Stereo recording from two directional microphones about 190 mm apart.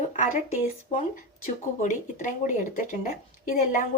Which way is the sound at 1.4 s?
40° left (ahead or behind).